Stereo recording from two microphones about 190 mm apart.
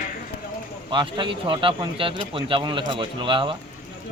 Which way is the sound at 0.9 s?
25° right (ahead or behind).